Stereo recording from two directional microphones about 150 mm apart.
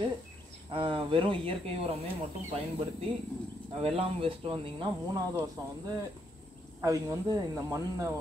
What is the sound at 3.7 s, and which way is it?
Speech, 40° right (ahead or behind).